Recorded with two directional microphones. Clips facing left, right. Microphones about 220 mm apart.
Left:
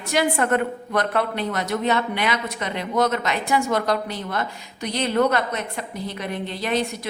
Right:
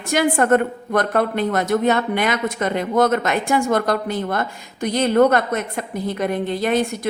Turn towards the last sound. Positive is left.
turn(degrees=-50)  # may be behind; listen again after turning